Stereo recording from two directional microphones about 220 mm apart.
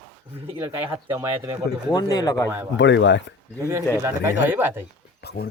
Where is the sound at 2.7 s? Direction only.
55° left (ahead or behind).